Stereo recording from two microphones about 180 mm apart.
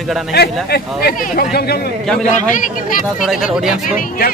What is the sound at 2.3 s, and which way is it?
Speech, 45° left (ahead or behind).